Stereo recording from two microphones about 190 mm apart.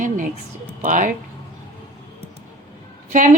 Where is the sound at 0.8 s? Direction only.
45° right (ahead or behind).